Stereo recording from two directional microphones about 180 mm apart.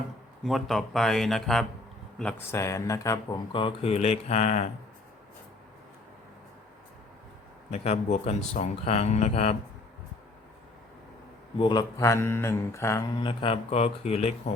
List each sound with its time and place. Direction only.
0.4 s speech: centre (ahead or behind)
2.6 s speech: 15° left (ahead or behind); by 4.7 s 40° left (ahead or behind)
7.7 s speech: 40° left (ahead or behind)
11.6 s mantra: 25° left (ahead or behind)
13.1 s speech: 30° left (ahead or behind)